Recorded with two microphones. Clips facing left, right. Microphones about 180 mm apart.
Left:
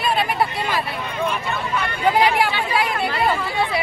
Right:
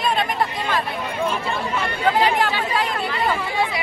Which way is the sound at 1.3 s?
30° right (ahead or behind).